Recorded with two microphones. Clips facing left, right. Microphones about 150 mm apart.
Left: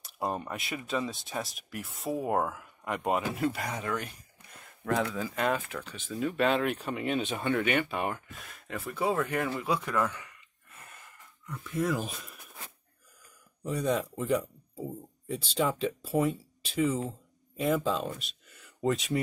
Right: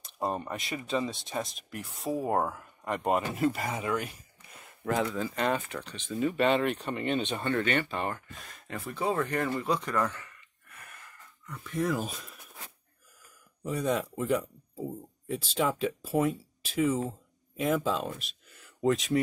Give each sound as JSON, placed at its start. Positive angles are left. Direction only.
{"t": 0.0, "sound": "speech", "side_deg": 0}
{"t": 10.7, "sound": "a sound", "side_deg": 25}
{"t": 11.4, "sound": "speech", "side_deg": 0}
{"t": 13.7, "sound": "speech", "side_deg": 0}